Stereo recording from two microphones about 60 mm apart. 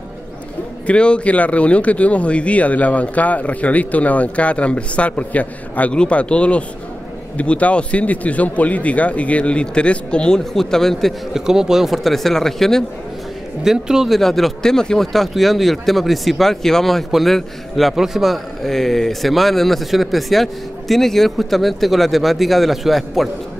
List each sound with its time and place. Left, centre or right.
0.8 s speech: centre
11.3 s speech: centre
13.7 s speech: centre